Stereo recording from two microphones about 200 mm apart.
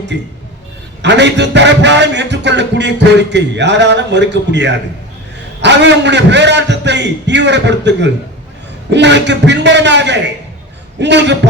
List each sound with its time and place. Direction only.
0.1 s a man's voice: 60° right (ahead or behind)